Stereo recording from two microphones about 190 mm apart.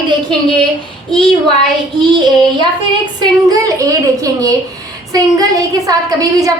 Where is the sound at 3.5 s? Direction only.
20° right (ahead or behind).